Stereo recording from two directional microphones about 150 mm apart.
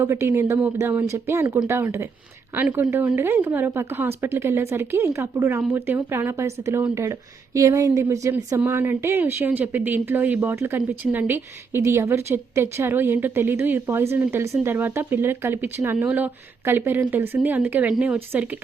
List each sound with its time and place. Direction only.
0.0 s speech: 15° right (ahead or behind)